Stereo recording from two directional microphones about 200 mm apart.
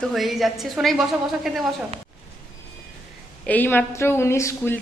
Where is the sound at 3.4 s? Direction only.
10° left (ahead or behind).